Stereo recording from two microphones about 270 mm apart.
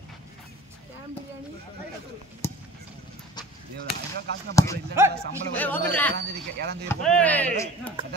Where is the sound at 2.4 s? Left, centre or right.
Centre.